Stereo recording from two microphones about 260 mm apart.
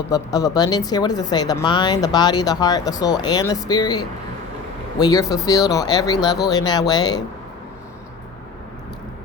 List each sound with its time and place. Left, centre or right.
0.1 s speech: centre